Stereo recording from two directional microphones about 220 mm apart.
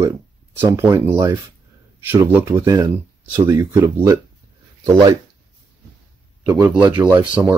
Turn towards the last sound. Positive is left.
turn(degrees=-10)  # may be behind; listen again after turning